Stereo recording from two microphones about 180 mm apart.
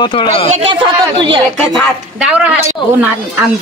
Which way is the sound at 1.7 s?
Centre (ahead or behind).